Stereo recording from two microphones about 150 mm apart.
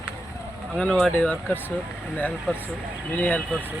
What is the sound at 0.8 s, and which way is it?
Speech, 5° left (ahead or behind).